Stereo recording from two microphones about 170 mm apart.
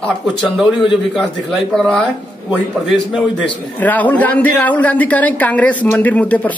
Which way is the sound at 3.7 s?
10° left (ahead or behind).